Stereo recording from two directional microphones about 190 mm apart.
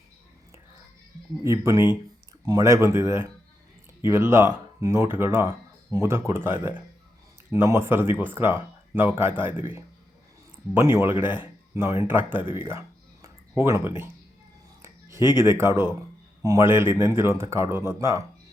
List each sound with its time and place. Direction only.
1.5 s speech: 15° right (ahead or behind)
10.8 s speech: 15° right (ahead or behind)
14.8 s a sound: 15° right (ahead or behind)
15.4 s speech: 15° right (ahead or behind)